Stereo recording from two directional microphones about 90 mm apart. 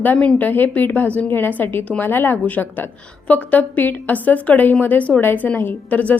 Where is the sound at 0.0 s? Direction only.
15° left (ahead or behind).